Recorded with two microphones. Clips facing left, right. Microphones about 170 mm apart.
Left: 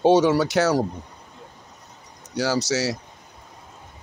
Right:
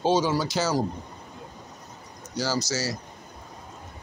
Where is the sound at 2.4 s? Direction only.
70° left (ahead or behind).